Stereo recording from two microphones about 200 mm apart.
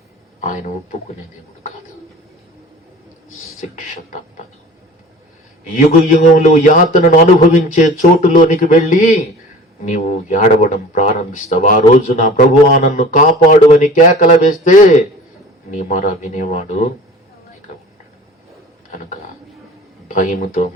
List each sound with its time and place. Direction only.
5.7 s a man's voice: 40° left (ahead or behind)
20.1 s speech: 40° left (ahead or behind)